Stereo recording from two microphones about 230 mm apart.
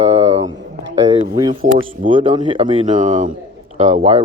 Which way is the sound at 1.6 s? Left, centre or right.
Right.